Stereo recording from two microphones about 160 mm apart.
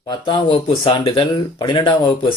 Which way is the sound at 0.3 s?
30° left (ahead or behind).